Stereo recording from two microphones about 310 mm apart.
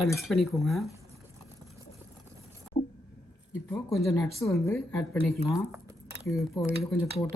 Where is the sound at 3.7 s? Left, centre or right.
Centre.